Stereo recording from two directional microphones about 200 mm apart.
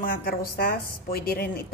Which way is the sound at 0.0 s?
50° left (ahead or behind).